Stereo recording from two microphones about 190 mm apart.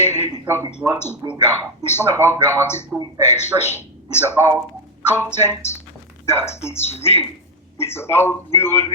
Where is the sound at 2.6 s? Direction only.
10° left (ahead or behind).